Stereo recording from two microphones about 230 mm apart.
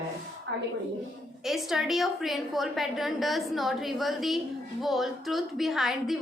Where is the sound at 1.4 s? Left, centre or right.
Centre.